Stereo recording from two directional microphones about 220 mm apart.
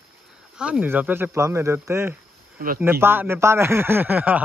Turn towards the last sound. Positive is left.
turn(degrees=-5)  # may be behind; listen again after turning